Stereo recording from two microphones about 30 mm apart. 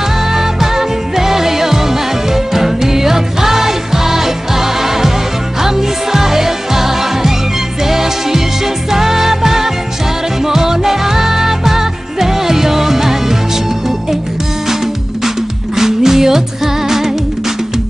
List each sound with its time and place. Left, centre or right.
0.3 s music: centre
15.2 s music: centre